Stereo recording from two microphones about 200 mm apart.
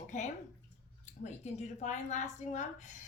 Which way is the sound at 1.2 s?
35° left (ahead or behind).